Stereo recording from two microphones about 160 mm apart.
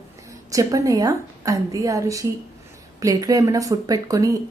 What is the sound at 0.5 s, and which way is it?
A woman's voice, 20° right (ahead or behind).